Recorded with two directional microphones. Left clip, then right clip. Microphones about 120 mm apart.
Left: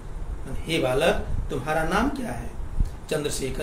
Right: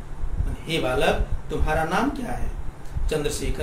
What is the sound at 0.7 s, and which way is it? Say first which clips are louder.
Speech: even; 40° left (ahead or behind).